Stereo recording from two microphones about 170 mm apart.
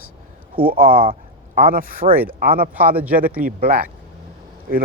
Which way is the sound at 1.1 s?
55° right (ahead or behind).